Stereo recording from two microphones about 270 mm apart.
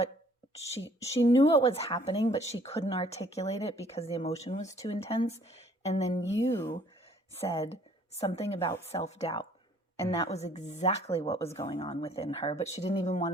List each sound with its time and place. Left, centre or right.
0.9 s speech: left
6.3 s speech: centre
7.3 s a woman's voice: left